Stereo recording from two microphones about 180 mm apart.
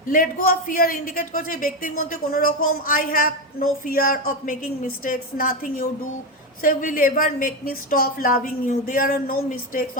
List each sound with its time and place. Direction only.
0.1 s a woman's voice: 50° left (ahead or behind)